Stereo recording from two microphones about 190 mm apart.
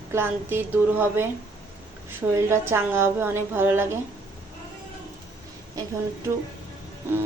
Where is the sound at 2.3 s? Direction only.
15° right (ahead or behind).